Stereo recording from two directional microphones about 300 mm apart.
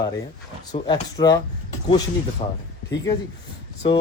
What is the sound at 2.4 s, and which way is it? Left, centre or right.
Speech, centre.